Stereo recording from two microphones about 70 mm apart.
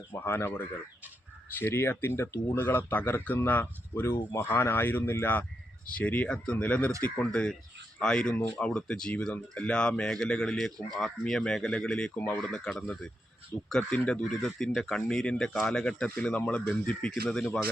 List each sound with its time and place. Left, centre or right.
0.3 s speech: left
6.2 s speech: centre
7.3 s speech: centre
12.1 s speech: left
12.5 s speech: centre